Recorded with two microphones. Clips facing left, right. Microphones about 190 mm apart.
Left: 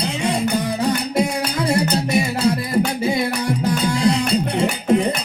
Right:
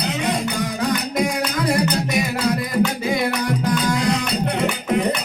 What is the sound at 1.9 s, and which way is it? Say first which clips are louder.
Music: left 2 dB; 30° left (ahead or behind).